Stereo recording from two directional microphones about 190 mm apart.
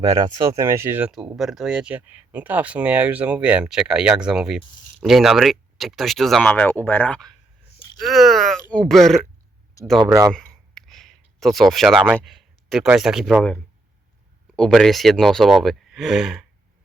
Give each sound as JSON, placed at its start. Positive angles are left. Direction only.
{"t": 0.0, "sound": "speech", "side_deg": -20}
{"t": 10.0, "sound": "speech", "side_deg": -20}
{"t": 10.3, "sound": "a sound", "side_deg": 5}
{"t": 11.3, "sound": "speech", "side_deg": 0}